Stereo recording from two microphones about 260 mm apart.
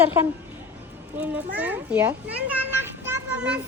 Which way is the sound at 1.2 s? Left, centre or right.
Centre.